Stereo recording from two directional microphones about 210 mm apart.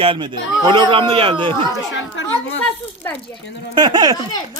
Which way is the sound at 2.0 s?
65° left (ahead or behind).